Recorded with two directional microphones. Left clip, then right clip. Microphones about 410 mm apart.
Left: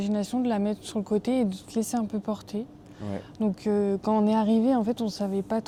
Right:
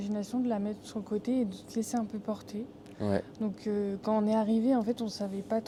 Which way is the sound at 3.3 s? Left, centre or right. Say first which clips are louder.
Left 7 dB; left.